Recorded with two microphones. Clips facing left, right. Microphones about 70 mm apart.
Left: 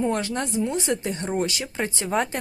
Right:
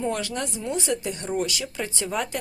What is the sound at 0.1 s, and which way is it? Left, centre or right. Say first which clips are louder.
A woman's voice: left 3 dB; left.